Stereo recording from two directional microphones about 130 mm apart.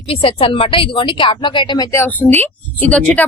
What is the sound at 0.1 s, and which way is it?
A woman's voice, 45° left (ahead or behind).